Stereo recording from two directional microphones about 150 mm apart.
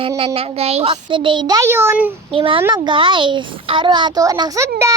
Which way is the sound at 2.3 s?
35° right (ahead or behind).